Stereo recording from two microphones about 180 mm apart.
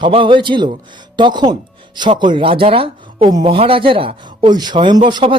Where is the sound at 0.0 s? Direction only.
30° right (ahead or behind).